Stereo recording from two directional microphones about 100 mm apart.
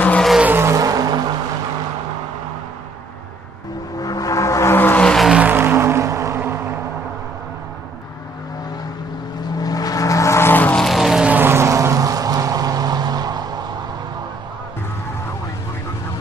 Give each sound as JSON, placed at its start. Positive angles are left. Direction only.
{"t": 0.4, "sound": "vehicle", "side_deg": -20}
{"t": 0.7, "sound": "vehicle", "side_deg": -35}
{"t": 4.0, "sound": "a sound", "side_deg": 35}
{"t": 4.7, "sound": "music", "side_deg": 20}
{"t": 5.0, "sound": "vehicle", "side_deg": 0}
{"t": 5.4, "sound": "music", "side_deg": -20}
{"t": 9.6, "sound": "vehicle", "side_deg": 40}
{"t": 10.8, "sound": "vehicle", "side_deg": 0}
{"t": 11.2, "sound": "vehicle", "side_deg": -20}